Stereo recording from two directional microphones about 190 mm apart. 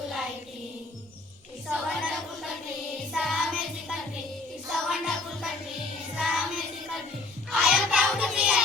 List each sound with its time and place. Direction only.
1.6 s music: 5° right (ahead or behind)
6.1 s child singing: 5° right (ahead or behind)
7.5 s music: 5° right (ahead or behind)